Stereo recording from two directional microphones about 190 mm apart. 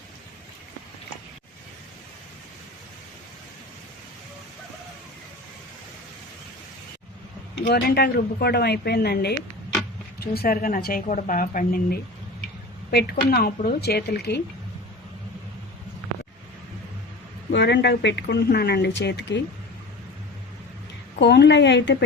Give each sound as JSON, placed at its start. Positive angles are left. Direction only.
{"t": 7.6, "sound": "a woman's voice", "side_deg": 55}
{"t": 17.5, "sound": "speech", "side_deg": 65}
{"t": 21.2, "sound": "speech", "side_deg": 65}